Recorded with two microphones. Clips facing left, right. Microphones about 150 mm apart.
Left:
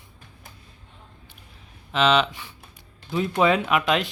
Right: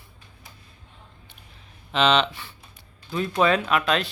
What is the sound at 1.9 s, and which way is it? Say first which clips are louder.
Speech: left 1 dB; 5° left (ahead or behind).